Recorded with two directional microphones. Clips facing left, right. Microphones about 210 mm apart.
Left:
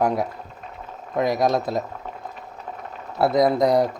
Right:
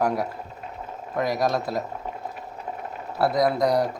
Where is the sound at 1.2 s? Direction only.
20° left (ahead or behind).